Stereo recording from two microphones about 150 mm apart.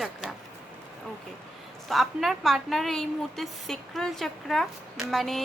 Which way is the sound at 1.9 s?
Centre (ahead or behind).